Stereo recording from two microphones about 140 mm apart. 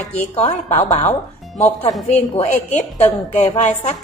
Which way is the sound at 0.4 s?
50° left (ahead or behind).